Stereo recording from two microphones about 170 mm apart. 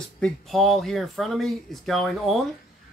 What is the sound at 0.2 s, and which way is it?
Speech, centre (ahead or behind).